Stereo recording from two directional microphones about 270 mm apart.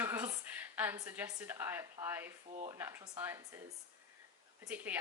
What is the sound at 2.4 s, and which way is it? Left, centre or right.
Speech, right.